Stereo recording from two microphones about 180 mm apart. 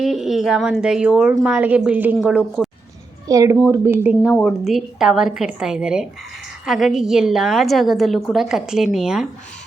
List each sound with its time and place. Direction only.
0.0 s a woman's voice: centre (ahead or behind)
3.2 s a woman's voice: 20° right (ahead or behind); by 9.2 s centre (ahead or behind)